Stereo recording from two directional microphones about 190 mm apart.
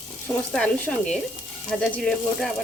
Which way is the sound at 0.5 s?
5° left (ahead or behind).